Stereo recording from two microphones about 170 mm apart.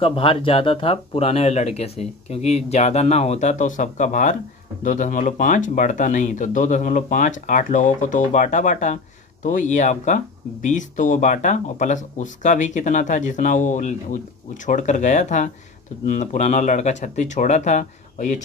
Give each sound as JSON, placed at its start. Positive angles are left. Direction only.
{"t": 0.0, "sound": "speech", "side_deg": 30}